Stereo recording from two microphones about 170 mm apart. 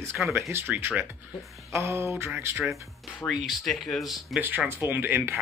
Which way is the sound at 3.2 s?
Centre (ahead or behind).